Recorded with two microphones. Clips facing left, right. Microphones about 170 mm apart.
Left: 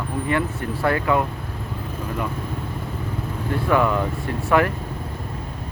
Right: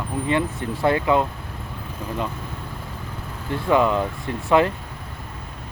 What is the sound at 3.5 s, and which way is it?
Speech, 20° right (ahead or behind).